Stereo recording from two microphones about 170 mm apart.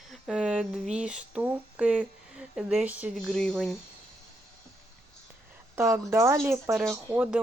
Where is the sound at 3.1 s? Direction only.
5° left (ahead or behind).